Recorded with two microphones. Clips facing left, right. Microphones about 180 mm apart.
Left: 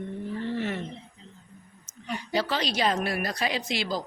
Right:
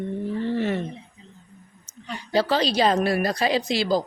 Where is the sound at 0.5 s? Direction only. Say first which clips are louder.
Right 6 dB; 35° right (ahead or behind).